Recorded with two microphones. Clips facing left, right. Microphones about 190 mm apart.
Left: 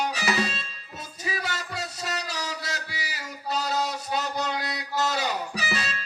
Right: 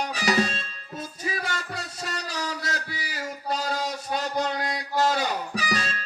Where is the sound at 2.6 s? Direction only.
50° right (ahead or behind).